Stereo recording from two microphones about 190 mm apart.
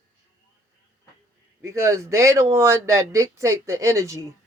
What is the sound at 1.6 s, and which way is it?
Speech, 15° right (ahead or behind).